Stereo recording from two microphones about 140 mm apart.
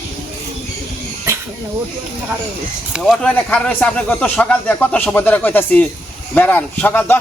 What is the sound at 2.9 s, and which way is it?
Speech, centre (ahead or behind).